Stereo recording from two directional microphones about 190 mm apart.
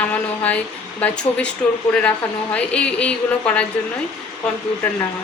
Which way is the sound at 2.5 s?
5° left (ahead or behind).